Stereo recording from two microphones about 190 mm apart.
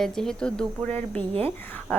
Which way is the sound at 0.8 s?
35° right (ahead or behind).